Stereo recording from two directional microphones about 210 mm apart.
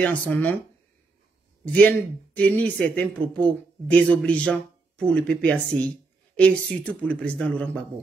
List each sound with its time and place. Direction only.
0.0 s speech: 5° left (ahead or behind)
1.7 s speech: 5° left (ahead or behind)